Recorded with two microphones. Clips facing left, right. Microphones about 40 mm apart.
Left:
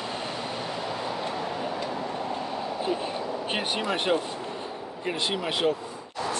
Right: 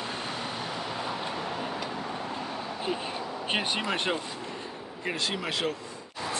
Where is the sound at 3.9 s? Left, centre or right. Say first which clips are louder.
Left 4 dB; centre.